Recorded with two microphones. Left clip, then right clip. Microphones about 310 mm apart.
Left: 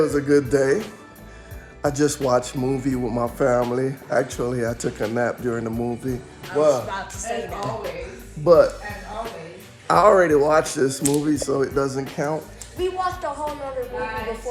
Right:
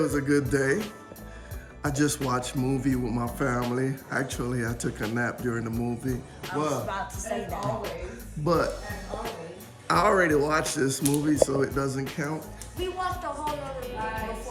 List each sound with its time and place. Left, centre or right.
0.3 s speech: centre
6.8 s speech: right
8.4 s music: centre
9.8 s speech: centre
12.8 s speech: centre
13.4 s speech: centre